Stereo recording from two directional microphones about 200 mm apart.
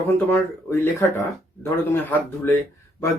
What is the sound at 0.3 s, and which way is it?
Speech, 10° left (ahead or behind).